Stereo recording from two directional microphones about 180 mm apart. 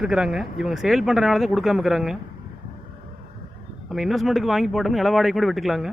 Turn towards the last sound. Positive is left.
turn(degrees=0)  # may be behind; listen again after turning